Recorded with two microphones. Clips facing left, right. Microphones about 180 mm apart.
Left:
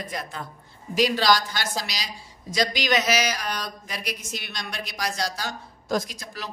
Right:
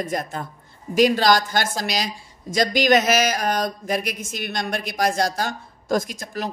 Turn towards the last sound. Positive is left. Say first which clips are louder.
# right 5 dB
turn(degrees=-50)  # may be behind; listen again after turning